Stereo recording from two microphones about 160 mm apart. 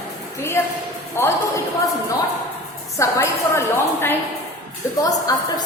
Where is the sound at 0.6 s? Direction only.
15° left (ahead or behind).